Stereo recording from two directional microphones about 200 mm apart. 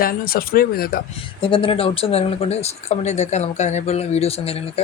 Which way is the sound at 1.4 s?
25° left (ahead or behind).